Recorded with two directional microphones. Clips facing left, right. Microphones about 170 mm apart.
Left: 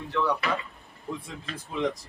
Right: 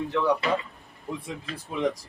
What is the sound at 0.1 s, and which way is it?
Speech, 20° right (ahead or behind).